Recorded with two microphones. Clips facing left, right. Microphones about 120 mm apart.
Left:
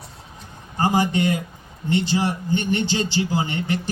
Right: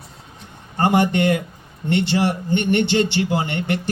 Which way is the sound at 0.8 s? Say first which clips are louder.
Right 3 dB; 65° right (ahead or behind).